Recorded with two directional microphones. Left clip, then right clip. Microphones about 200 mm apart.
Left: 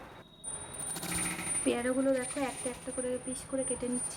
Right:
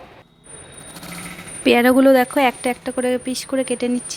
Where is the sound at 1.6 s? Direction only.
40° right (ahead or behind).